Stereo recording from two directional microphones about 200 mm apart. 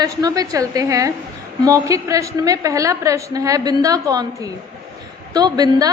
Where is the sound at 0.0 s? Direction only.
20° right (ahead or behind).